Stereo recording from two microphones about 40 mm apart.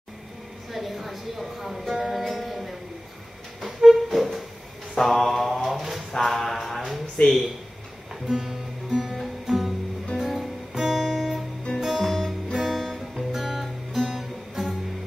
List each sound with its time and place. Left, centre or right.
0.7 s a woman's voice: centre
2.0 s music: centre
4.9 s mantra: centre
6.1 s a sound: centre
7.2 s speech: left
8.3 s music: centre
10.7 s guitar: centre
11.8 s music: centre
12.1 s music: centre
12.5 s guitar: centre